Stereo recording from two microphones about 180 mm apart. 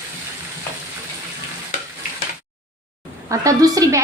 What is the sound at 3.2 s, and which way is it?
Speech, 20° right (ahead or behind).